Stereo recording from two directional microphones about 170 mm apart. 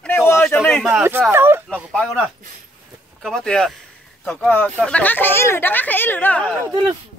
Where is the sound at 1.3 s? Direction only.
15° right (ahead or behind).